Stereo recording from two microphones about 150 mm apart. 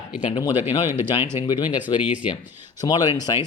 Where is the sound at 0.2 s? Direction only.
45° left (ahead or behind).